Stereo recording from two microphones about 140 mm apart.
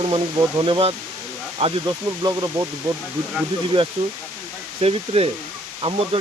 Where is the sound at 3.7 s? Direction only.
40° right (ahead or behind).